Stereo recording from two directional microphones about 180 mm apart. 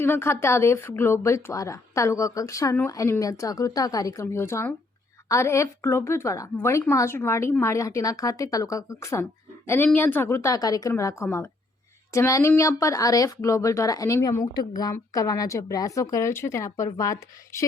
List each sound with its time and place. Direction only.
0.0 s speech: 15° left (ahead or behind)